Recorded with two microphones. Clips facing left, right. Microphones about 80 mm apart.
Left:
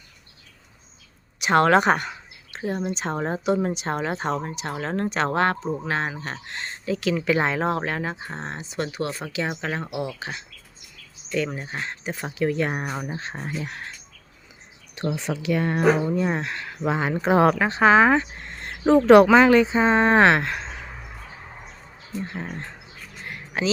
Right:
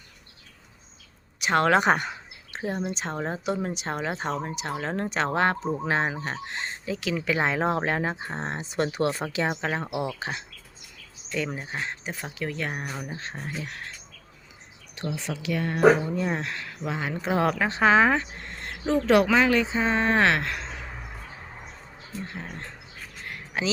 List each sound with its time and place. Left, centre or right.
1.4 s speech: centre
1.8 s speech: centre
8.7 s speech: right
9.5 s speech: centre
10.2 s speech: right
11.3 s speech: centre
12.2 s speech: centre
12.9 s speech: left
15.1 s speech: left
16.0 s speech: centre
16.8 s speech: left
17.6 s speech: centre
18.6 s speech: left